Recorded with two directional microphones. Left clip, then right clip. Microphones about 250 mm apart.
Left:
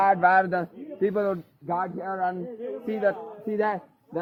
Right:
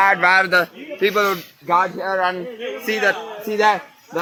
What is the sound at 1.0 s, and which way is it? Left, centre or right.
Speech, left.